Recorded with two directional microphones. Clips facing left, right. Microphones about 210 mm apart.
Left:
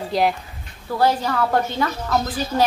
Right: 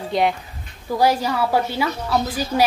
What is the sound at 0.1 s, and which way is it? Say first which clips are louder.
Speech: even; centre (ahead or behind).